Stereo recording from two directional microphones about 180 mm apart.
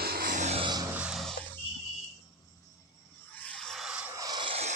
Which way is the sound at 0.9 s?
5° right (ahead or behind).